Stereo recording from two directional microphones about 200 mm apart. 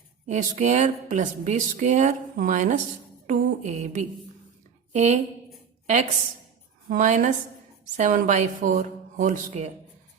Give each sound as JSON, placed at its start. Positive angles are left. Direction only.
{"t": 0.3, "sound": "a woman's voice", "side_deg": -35}